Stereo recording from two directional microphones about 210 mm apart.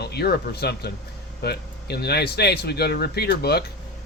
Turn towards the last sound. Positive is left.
turn(degrees=50)  # may be behind; listen again after turning